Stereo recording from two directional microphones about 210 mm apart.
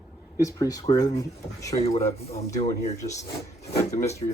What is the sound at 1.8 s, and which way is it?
Speech, 30° left (ahead or behind).